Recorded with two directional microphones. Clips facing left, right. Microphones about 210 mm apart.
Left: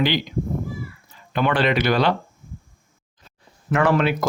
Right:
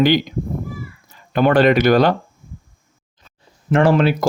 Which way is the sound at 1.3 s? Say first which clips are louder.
Right 7 dB; 45° right (ahead or behind).